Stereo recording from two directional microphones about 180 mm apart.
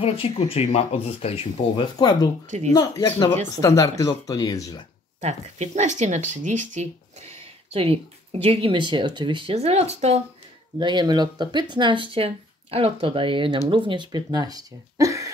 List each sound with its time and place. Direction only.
0.0 s speech: 30° left (ahead or behind)
5.2 s speech: 40° right (ahead or behind)
10.8 s speech: 25° right (ahead or behind)